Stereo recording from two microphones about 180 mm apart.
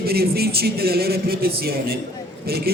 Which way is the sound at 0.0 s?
60° right (ahead or behind).